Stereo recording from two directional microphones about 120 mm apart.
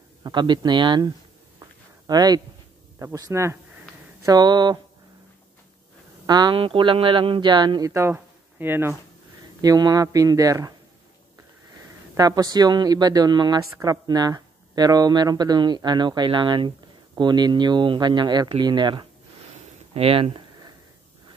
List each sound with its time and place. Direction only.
0.2 s speech: 40° right (ahead or behind)
6.2 s speech: 35° right (ahead or behind)
7.9 s speech: 20° right (ahead or behind)
9.6 s speech: 35° right (ahead or behind)
12.2 s speech: 30° right (ahead or behind)
19.9 s speech: 50° right (ahead or behind)